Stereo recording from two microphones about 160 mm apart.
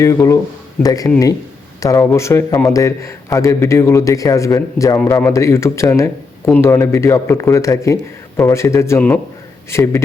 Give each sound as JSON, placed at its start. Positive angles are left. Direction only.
{"t": 0.0, "sound": "a man's voice", "side_deg": 20}